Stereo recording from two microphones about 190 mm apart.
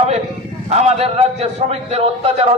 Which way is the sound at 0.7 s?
35° right (ahead or behind).